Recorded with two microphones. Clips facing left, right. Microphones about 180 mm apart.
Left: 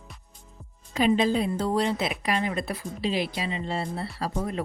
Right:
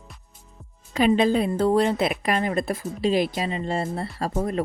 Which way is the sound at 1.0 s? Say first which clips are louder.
Right 3 dB; 60° right (ahead or behind).